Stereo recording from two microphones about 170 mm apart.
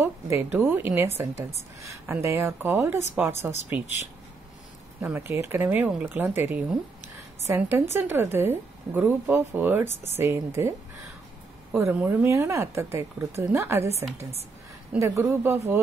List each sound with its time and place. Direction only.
0.0 s a woman's voice: 15° right (ahead or behind)
5.0 s speech: 15° right (ahead or behind)
11.7 s speech: 10° right (ahead or behind)